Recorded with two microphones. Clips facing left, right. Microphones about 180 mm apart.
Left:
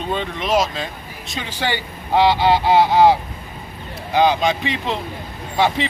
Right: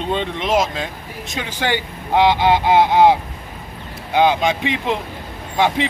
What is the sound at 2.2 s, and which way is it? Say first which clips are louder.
Speech: right 1 dB; 20° right (ahead or behind).